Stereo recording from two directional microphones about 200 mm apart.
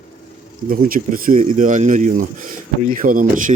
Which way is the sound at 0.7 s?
45° right (ahead or behind).